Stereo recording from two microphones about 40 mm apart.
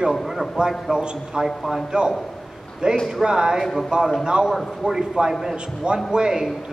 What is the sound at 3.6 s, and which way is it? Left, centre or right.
Speech, centre.